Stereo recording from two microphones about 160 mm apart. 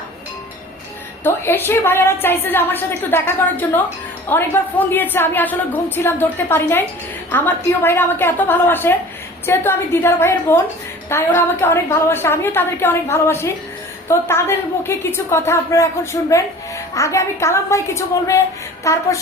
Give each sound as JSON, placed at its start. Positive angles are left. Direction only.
{"t": 1.2, "sound": "a woman's voice", "side_deg": 15}